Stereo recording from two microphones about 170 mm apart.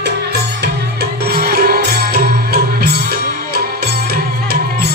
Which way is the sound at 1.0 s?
65° right (ahead or behind).